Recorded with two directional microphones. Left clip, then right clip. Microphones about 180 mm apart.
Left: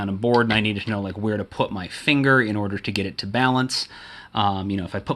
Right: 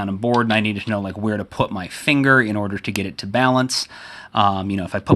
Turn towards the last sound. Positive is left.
turn(degrees=-30)  # may be behind; listen again after turning